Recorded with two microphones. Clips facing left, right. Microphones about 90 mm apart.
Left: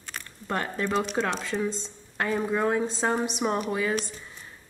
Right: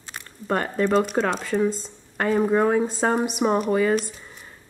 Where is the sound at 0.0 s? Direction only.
15° right (ahead or behind).